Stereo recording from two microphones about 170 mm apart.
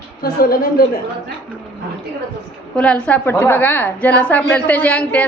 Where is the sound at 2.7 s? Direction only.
5° left (ahead or behind).